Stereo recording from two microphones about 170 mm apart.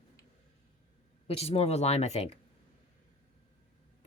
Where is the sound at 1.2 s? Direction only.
35° left (ahead or behind).